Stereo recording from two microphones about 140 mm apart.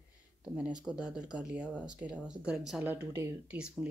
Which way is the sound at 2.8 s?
15° right (ahead or behind).